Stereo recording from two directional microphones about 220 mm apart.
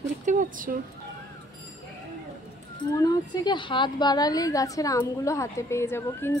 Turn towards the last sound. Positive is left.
turn(degrees=10)  # may be behind; listen again after turning